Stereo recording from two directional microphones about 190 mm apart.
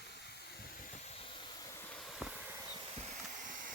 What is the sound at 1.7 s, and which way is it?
Vehicle, 10° left (ahead or behind).